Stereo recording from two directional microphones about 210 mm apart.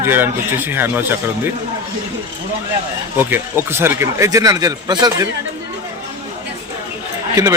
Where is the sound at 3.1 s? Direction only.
10° right (ahead or behind).